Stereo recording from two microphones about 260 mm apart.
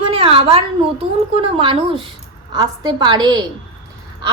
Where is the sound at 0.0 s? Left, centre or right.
Right.